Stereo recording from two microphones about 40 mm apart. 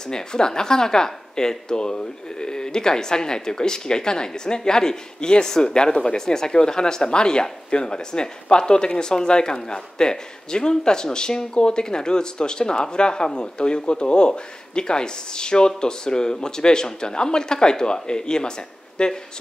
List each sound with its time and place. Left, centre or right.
0.1 s speech: centre